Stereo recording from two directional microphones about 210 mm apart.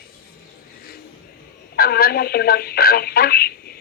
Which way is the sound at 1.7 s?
45° left (ahead or behind).